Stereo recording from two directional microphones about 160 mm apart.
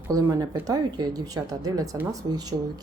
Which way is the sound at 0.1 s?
20° right (ahead or behind).